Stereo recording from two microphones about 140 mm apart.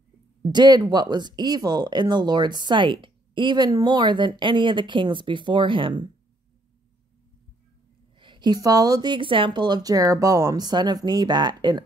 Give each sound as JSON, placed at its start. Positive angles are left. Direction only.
{"t": 0.4, "sound": "speech", "side_deg": -30}
{"t": 8.2, "sound": "speech", "side_deg": -35}